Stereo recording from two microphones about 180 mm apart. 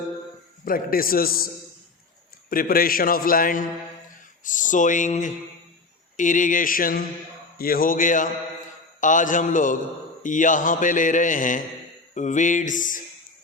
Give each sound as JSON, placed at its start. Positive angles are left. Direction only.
{"t": 0.6, "sound": "a man's voice", "side_deg": 55}
{"t": 2.5, "sound": "a man's voice", "side_deg": 55}